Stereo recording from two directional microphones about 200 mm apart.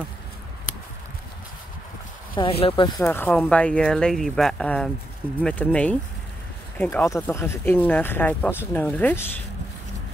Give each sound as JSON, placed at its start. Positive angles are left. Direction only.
{"t": 2.4, "sound": "speech", "side_deg": 25}